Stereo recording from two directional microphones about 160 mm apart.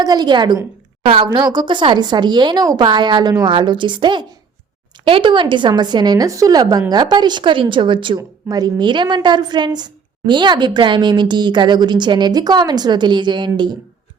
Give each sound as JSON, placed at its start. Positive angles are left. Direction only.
{"t": 0.0, "sound": "speech", "side_deg": -25}